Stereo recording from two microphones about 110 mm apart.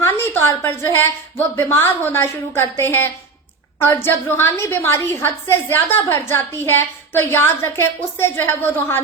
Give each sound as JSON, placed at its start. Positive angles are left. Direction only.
{"t": 0.0, "sound": "a woman's voice", "side_deg": 20}